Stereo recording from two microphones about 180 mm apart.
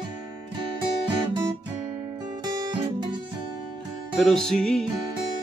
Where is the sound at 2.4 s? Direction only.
20° right (ahead or behind).